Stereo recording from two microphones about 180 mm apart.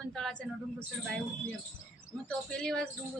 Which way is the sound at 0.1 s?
5° left (ahead or behind).